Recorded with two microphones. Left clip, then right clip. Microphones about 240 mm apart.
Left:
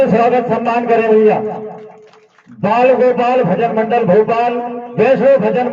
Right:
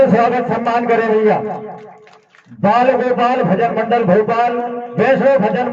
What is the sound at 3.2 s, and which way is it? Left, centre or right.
Speech, right.